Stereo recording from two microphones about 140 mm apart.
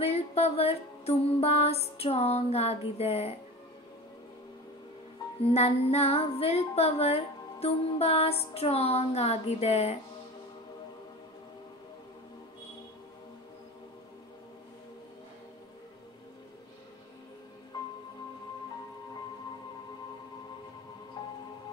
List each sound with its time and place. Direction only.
0.0 s music: 45° left (ahead or behind)
5.4 s music: 45° left (ahead or behind)
21.2 s music: 30° left (ahead or behind)